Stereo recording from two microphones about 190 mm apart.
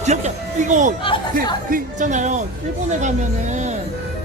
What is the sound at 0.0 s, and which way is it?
Speech, 35° right (ahead or behind).